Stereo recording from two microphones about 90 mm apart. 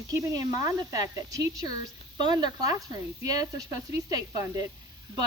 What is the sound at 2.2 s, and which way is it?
Speech, 55° right (ahead or behind).